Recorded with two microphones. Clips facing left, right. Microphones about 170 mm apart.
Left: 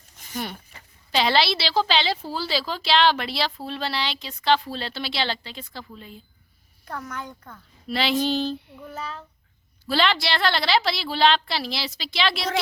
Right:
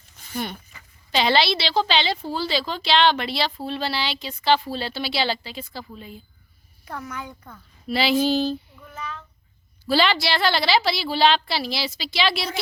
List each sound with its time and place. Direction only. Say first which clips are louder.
1.1 s a woman's voice: right 1 dB; centre (ahead or behind)
8.9 s a child's voice: left 1 dB; 35° left (ahead or behind)
9.8 s a woman's voice: right 2 dB; 5° right (ahead or behind)